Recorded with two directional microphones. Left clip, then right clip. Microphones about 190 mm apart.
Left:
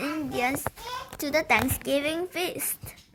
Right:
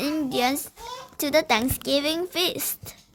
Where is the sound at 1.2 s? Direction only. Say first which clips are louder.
Right 3 dB; 25° right (ahead or behind).